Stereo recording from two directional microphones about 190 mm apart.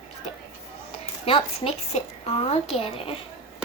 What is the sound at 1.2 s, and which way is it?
A woman's voice, 30° left (ahead or behind).